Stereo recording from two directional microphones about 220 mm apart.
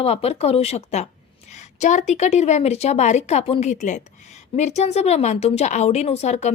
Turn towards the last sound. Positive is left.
turn(degrees=30)  # may be behind; listen again after turning